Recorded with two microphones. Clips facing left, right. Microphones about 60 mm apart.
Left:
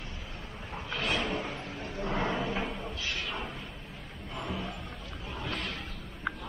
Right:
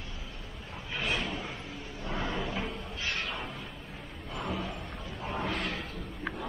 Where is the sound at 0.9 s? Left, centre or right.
Centre.